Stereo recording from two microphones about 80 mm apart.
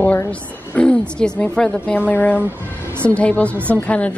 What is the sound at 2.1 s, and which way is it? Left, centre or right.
A woman's voice, left.